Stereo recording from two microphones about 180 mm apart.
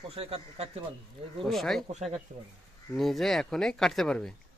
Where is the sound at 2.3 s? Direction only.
45° right (ahead or behind).